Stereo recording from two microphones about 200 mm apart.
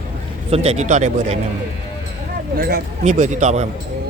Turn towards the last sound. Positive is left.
turn(degrees=-35)  # may be behind; listen again after turning